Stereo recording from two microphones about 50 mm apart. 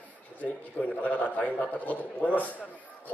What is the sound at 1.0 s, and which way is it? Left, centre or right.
Speech, left.